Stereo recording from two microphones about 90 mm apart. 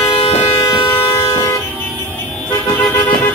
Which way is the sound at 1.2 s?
35° left (ahead or behind).